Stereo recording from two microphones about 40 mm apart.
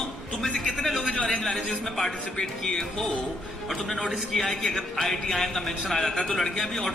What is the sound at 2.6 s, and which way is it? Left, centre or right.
A man's voice, centre.